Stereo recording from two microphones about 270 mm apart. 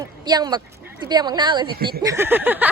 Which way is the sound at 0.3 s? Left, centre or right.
Centre.